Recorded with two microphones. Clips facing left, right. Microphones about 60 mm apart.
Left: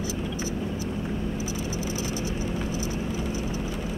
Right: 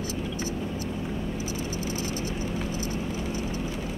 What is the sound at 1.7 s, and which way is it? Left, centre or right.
Vehicle, right.